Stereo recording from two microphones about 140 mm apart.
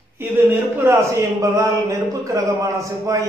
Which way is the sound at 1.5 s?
20° right (ahead or behind).